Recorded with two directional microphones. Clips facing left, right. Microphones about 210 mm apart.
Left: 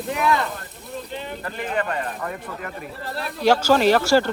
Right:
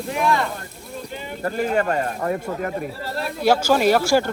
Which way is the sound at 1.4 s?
40° right (ahead or behind).